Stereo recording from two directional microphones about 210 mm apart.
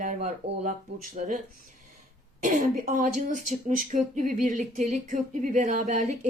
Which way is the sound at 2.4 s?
40° right (ahead or behind).